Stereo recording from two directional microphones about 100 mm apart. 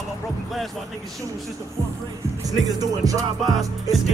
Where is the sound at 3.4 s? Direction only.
Centre (ahead or behind).